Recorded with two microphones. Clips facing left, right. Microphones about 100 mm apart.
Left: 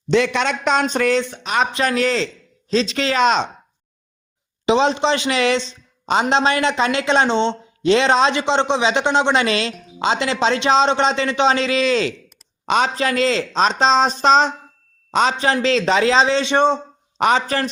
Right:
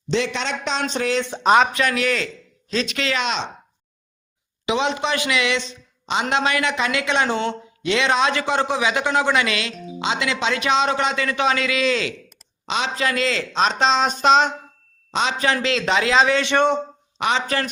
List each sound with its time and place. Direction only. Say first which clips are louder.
0.1 s a man's voice: left 5 dB; 60° left (ahead or behind)
1.7 s speech: left 3 dB; 30° left (ahead or behind)
4.6 s a woman's voice: left 6 dB; 30° left (ahead or behind)
12.6 s a man's voice: left 5 dB; 45° left (ahead or behind)
15.4 s a man's voice: left 3 dB; 30° left (ahead or behind)
17.2 s speech: left 4 dB; 40° left (ahead or behind)